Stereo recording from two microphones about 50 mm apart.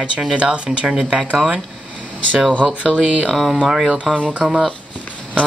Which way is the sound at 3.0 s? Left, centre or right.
Centre.